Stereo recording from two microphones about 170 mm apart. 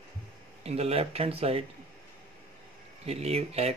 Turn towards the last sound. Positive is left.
turn(degrees=-35)  # may be behind; listen again after turning